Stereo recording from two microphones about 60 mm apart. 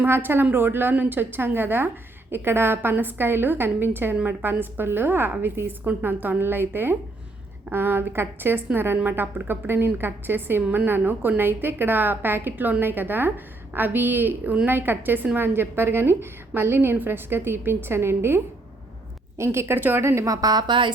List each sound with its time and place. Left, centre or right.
0.0 s a woman's voice: right
4.2 s a woman's voice: right
4.4 s a woman's voice: right
20.2 s speech: right